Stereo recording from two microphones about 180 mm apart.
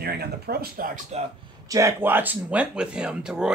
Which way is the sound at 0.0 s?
60° right (ahead or behind).